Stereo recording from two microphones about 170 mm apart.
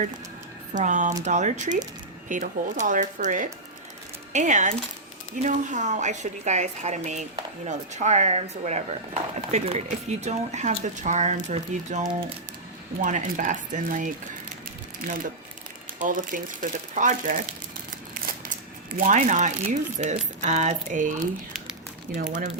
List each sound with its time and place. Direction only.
0.7 s speech: 45° right (ahead or behind)
16.0 s speech: 50° right (ahead or behind)
18.9 s speech: 50° right (ahead or behind)